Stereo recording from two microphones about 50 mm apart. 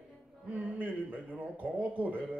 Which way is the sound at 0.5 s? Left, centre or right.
Right.